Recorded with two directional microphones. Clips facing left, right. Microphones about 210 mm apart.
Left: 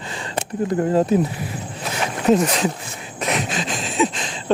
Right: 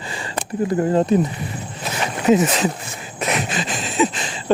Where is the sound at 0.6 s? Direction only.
Centre (ahead or behind).